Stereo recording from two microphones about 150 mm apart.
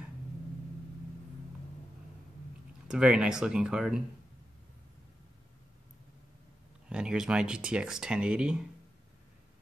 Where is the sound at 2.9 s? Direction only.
5° right (ahead or behind).